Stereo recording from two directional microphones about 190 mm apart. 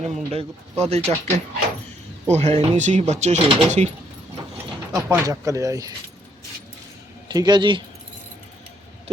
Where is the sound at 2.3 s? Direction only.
35° right (ahead or behind).